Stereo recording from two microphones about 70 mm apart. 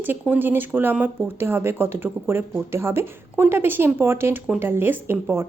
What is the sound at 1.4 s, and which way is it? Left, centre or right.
A woman's voice, right.